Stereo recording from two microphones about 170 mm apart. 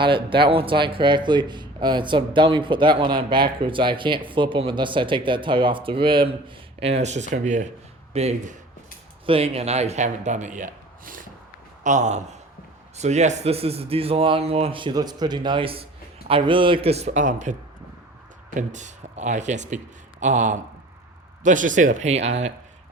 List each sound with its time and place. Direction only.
0.0 s a man's voice: 30° right (ahead or behind)